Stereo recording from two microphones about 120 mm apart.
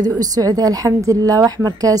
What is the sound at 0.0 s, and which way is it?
A woman's voice, 30° right (ahead or behind).